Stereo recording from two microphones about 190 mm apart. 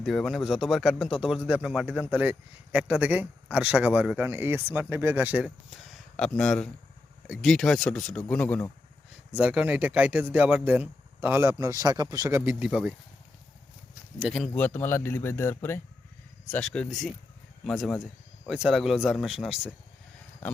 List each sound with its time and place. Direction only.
0.0 s speech: centre (ahead or behind)
9.3 s a man's voice: 5° right (ahead or behind)
14.2 s speech: centre (ahead or behind)